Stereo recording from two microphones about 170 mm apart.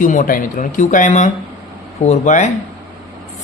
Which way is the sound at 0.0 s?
50° left (ahead or behind).